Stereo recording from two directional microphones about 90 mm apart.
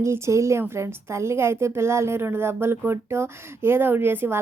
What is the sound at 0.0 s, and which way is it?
A woman's voice, 35° right (ahead or behind).